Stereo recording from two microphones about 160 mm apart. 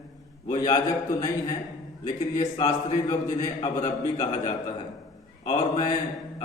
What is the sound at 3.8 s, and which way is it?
Speech, 45° left (ahead or behind).